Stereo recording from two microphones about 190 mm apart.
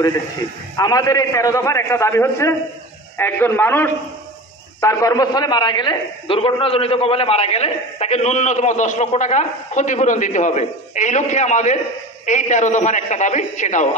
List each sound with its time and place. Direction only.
0.7 s a man's voice: 20° left (ahead or behind); by 13.8 s 40° left (ahead or behind)